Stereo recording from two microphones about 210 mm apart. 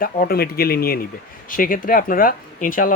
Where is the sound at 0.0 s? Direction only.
45° left (ahead or behind).